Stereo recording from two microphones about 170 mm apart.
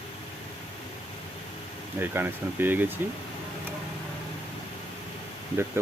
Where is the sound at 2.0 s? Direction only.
10° right (ahead or behind).